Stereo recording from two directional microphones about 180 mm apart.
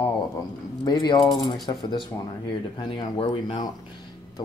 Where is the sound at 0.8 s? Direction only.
20° left (ahead or behind).